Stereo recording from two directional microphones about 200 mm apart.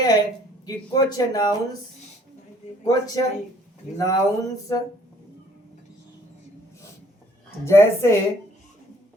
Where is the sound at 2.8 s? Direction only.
20° left (ahead or behind).